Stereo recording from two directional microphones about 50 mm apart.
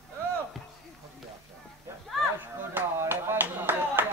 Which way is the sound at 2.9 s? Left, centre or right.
Right.